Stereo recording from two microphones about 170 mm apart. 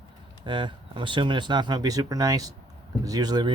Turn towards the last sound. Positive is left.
turn(degrees=-25)  # may be behind; listen again after turning